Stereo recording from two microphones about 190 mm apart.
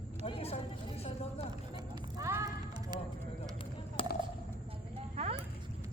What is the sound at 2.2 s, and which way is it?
Music, 15° right (ahead or behind).